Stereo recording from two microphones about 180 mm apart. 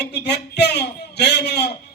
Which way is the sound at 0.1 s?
65° left (ahead or behind).